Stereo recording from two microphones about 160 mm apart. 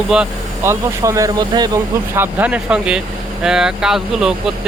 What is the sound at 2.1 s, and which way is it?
Speech, 10° right (ahead or behind).